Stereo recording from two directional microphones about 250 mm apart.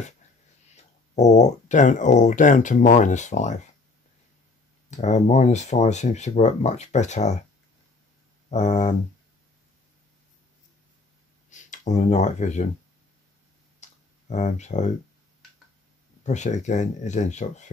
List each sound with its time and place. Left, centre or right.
0.7 s speech: left
4.9 s speech: left
8.5 s speech: left
11.5 s speech: left
13.7 s clicking: left
16.3 s speech: left